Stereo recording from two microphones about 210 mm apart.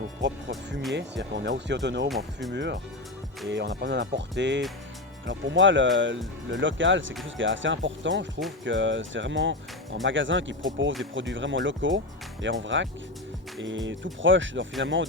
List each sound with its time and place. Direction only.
0.2 s music: 55° right (ahead or behind)
0.9 s speech: 55° right (ahead or behind)
2.0 s speech: centre (ahead or behind)
2.5 s speech: 55° right (ahead or behind)